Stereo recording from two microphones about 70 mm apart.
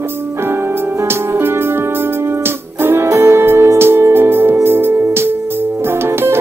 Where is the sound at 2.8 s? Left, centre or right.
Right.